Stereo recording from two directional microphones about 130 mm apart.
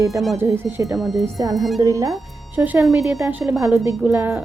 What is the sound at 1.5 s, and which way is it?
Speech, centre (ahead or behind).